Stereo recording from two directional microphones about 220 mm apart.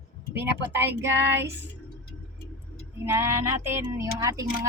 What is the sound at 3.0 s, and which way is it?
Speech, 10° right (ahead or behind).